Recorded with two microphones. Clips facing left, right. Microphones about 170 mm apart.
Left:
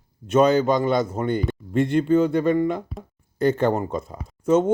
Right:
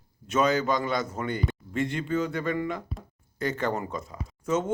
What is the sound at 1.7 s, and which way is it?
Speech, 55° left (ahead or behind).